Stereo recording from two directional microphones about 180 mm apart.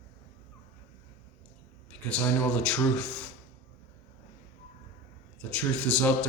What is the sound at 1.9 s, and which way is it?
A man's voice, 5° left (ahead or behind).